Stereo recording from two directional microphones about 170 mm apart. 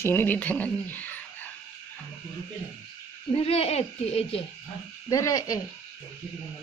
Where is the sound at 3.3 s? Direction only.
35° left (ahead or behind).